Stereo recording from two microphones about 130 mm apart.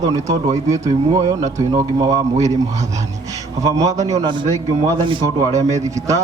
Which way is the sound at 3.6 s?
25° right (ahead or behind).